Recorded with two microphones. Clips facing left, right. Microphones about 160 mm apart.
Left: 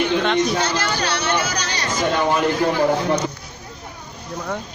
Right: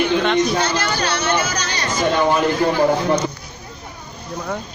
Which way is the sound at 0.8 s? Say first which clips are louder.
Right 1 dB; 50° right (ahead or behind).